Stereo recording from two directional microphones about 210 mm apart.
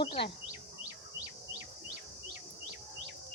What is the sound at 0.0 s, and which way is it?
Speech, 25° left (ahead or behind).